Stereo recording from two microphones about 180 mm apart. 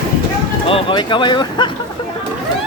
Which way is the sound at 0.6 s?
30° left (ahead or behind).